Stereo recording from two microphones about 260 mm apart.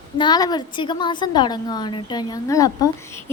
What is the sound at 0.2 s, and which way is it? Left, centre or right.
A woman's voice, centre.